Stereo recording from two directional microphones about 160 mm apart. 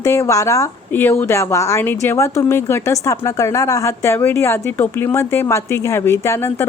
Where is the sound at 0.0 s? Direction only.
20° left (ahead or behind).